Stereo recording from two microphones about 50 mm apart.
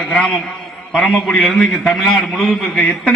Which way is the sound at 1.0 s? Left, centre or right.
Left.